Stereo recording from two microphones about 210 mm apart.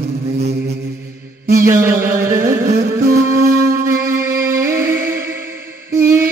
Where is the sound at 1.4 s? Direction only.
40° right (ahead or behind).